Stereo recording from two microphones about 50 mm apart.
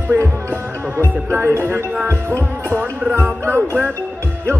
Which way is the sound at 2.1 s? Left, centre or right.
Right.